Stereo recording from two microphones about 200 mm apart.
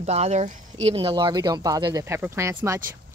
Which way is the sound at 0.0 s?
35° right (ahead or behind).